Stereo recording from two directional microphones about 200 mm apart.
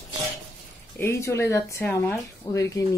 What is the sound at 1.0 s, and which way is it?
A woman's voice, 15° left (ahead or behind).